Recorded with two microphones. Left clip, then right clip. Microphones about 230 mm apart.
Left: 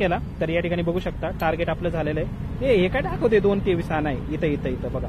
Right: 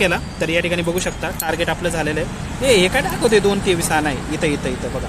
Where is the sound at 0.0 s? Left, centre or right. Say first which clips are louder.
Right 5 dB; centre.